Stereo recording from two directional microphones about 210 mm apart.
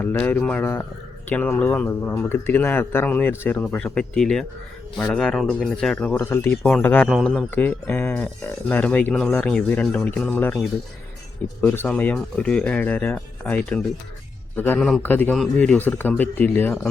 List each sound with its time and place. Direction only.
0.0 s speech: 10° left (ahead or behind)